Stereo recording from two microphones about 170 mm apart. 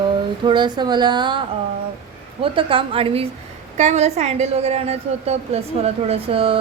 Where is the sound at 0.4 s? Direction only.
25° right (ahead or behind).